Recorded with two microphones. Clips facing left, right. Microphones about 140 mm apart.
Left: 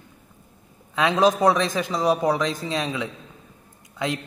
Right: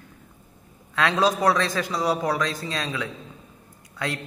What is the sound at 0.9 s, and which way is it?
A man's voice, 20° left (ahead or behind).